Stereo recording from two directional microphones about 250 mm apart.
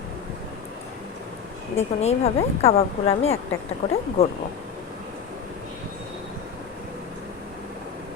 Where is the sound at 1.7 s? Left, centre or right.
Left.